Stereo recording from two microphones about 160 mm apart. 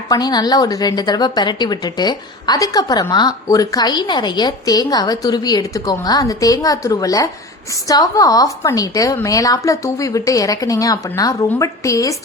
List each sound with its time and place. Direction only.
0.1 s a woman's voice: 25° left (ahead or behind)